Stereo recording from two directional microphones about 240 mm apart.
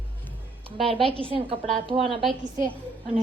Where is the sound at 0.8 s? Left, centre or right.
Right.